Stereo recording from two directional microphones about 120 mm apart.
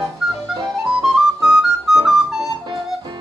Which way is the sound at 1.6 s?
5° right (ahead or behind).